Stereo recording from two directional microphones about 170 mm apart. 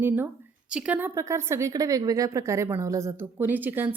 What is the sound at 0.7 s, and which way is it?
A woman's voice, 5° right (ahead or behind).